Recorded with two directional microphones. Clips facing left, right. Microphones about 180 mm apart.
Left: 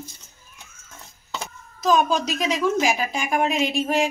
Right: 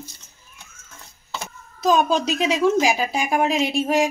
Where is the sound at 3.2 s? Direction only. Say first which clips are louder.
Right 1 dB; 35° right (ahead or behind).